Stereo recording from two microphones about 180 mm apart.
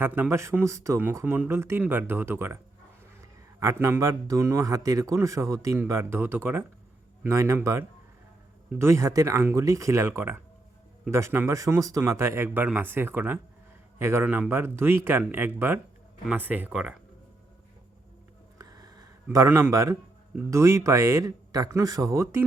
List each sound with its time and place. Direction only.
0.0 s a man's voice: 10° right (ahead or behind)
18.6 s a sound: 20° right (ahead or behind)
20.5 s a man's voice: 15° right (ahead or behind)